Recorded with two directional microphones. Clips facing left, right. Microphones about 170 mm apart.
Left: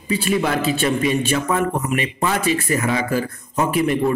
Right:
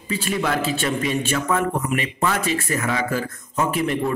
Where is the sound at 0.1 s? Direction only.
15° left (ahead or behind).